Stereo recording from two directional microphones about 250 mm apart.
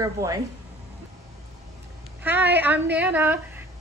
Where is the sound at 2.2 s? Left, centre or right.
Centre.